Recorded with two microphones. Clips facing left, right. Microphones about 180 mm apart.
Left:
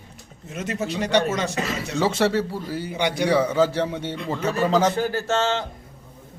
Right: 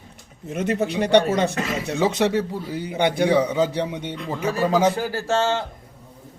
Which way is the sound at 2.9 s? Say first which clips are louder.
Right 4 dB; 55° right (ahead or behind).